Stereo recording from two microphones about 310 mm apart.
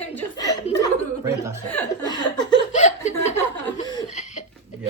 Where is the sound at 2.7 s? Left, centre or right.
Left.